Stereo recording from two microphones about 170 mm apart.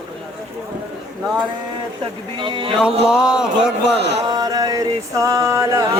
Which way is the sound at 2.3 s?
30° right (ahead or behind).